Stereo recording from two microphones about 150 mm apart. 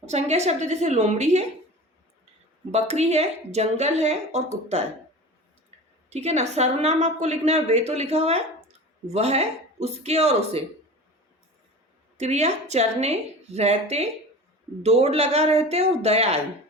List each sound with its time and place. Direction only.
0.0 s a woman's voice: 45° right (ahead or behind)
2.7 s a woman's voice: 45° right (ahead or behind)
6.1 s a woman's voice: 45° right (ahead or behind)
12.1 s a woman's voice: 45° right (ahead or behind)